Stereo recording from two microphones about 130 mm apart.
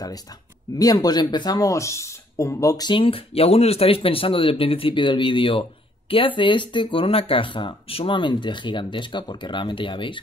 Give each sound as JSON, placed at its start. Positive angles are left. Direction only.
{"t": 0.7, "sound": "speech", "side_deg": 30}
{"t": 2.9, "sound": "speech", "side_deg": 45}